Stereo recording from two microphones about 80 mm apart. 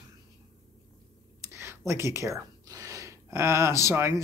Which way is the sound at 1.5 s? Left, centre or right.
Right.